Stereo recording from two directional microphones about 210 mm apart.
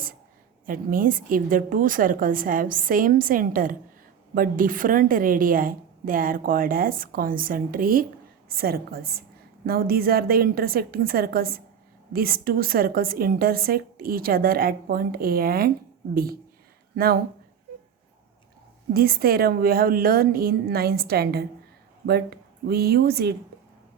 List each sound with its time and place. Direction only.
0.6 s a woman's voice: 40° right (ahead or behind)
16.9 s speech: 45° right (ahead or behind)
18.9 s a woman's voice: 45° right (ahead or behind)